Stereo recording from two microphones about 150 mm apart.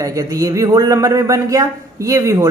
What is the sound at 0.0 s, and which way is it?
A man's voice, 20° right (ahead or behind).